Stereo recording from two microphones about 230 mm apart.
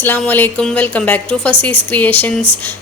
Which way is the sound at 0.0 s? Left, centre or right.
Centre.